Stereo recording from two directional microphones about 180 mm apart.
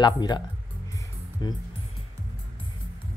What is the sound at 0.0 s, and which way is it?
Speech, 25° left (ahead or behind).